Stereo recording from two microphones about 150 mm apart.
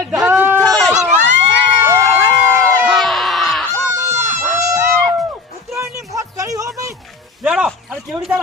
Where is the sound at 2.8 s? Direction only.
Centre (ahead or behind).